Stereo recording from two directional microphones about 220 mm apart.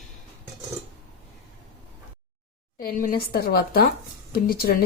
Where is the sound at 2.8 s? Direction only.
40° left (ahead or behind).